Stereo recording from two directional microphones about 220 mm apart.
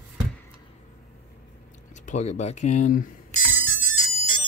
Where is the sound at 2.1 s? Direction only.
30° left (ahead or behind).